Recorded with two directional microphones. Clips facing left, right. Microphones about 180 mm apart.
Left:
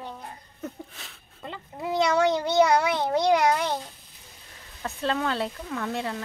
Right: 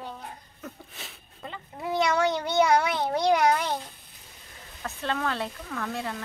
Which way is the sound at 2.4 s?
20° left (ahead or behind).